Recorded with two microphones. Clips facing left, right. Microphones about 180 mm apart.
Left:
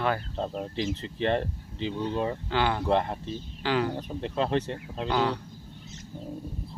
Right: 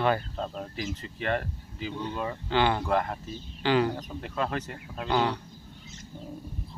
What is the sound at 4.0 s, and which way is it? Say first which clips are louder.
Speech: left 3 dB; 30° left (ahead or behind).